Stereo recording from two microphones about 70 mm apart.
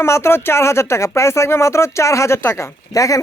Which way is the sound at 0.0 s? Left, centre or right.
Left.